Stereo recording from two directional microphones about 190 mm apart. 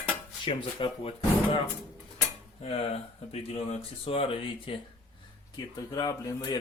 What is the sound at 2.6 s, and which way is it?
Speech, 30° left (ahead or behind).